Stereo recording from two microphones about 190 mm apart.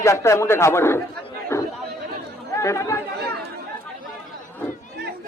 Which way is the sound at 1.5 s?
15° left (ahead or behind).